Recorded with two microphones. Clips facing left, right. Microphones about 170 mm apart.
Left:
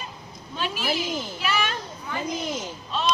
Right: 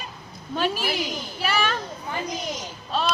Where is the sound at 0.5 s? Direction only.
45° right (ahead or behind).